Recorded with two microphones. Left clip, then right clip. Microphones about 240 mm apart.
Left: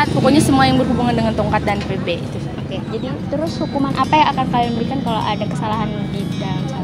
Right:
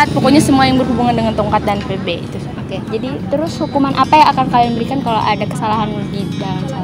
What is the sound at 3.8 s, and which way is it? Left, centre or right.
Speech, right.